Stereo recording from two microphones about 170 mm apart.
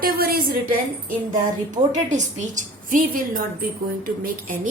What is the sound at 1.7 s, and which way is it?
A woman's voice, 45° right (ahead or behind).